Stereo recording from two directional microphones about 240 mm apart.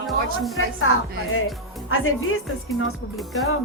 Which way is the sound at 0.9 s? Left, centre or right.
Left.